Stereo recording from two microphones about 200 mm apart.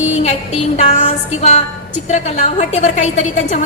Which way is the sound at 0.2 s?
35° left (ahead or behind).